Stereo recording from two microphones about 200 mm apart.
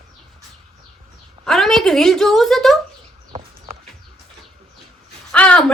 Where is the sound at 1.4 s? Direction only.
Centre (ahead or behind).